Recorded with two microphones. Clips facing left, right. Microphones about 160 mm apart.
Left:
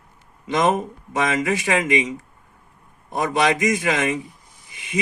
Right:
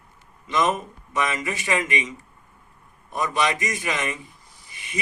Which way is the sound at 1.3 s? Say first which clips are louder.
Left 5 dB; 90° left.